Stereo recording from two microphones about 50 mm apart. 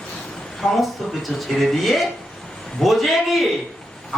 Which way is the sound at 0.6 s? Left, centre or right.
Centre.